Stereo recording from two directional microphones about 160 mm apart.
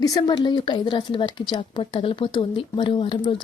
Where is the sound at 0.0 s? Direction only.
25° left (ahead or behind).